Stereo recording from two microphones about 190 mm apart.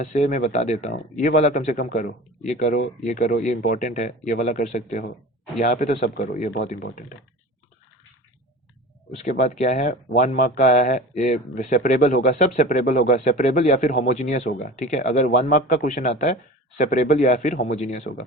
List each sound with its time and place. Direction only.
0.0 s speech: 40° left (ahead or behind)
9.2 s speech: 40° left (ahead or behind)